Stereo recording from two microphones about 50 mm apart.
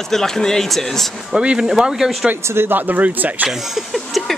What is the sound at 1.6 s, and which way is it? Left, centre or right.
Speech, centre.